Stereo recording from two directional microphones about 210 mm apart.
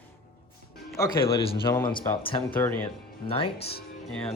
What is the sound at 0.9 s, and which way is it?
Speech, 20° left (ahead or behind).